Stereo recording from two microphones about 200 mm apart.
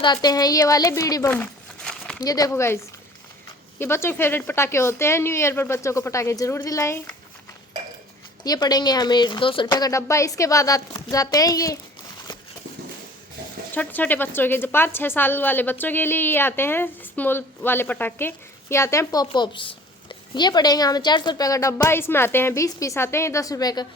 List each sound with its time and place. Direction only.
0.0 s speech: 20° left (ahead or behind); by 2.1 s 5° left (ahead or behind)
2.2 s a woman's voice: 20° left (ahead or behind)
3.8 s a woman's voice: 10° left (ahead or behind)
8.4 s speech: 20° left (ahead or behind)
13.7 s a woman's voice: 10° left (ahead or behind)